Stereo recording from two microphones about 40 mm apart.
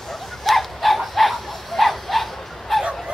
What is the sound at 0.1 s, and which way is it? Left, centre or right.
Bow-wow, centre.